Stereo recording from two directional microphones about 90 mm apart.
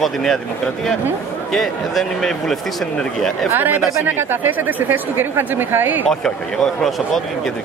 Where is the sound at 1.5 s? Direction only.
5° left (ahead or behind).